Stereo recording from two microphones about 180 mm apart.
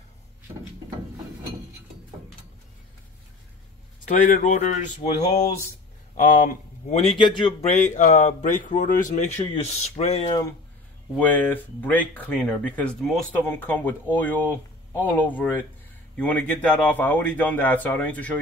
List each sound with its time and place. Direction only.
4.3 s a man's voice: 45° left (ahead or behind); by 10.5 s 25° left (ahead or behind)
11.1 s speech: 10° left (ahead or behind)